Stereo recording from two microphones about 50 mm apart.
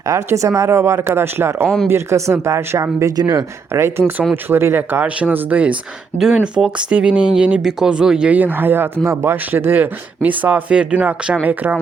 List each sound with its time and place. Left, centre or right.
0.0 s speech: right
0.9 s speech: right
1.6 s speech: centre
1.9 s speech: right
3.7 s speech: right
4.4 s speech: right
5.3 s speech: right
6.1 s speech: centre
6.4 s speech: right
7.6 s speech: centre
8.3 s speech: right